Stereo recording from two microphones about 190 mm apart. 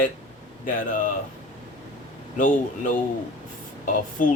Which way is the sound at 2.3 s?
45° left (ahead or behind).